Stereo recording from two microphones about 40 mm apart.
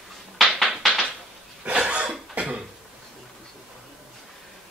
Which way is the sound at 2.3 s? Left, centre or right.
Right.